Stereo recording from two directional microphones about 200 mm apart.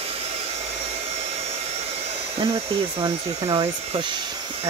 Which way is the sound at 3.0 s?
25° right (ahead or behind).